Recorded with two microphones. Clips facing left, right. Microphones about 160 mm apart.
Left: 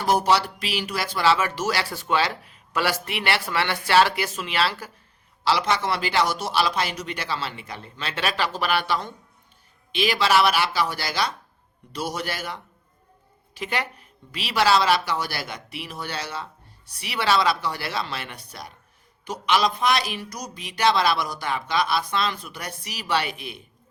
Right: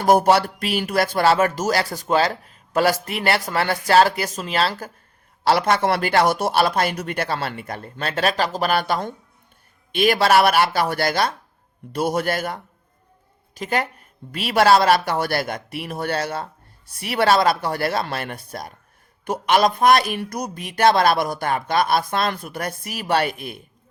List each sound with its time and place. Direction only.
0.0 s a woman's voice: 55° right (ahead or behind)
5.5 s a woman's voice: 50° right (ahead or behind)